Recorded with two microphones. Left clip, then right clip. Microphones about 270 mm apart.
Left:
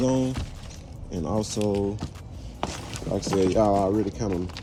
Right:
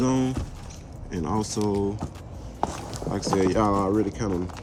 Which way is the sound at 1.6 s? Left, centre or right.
Centre.